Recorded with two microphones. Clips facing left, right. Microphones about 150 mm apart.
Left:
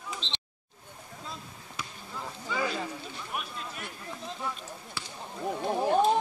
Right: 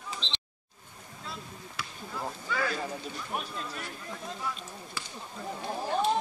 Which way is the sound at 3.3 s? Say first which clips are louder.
Right 1 dB; 35° right (ahead or behind).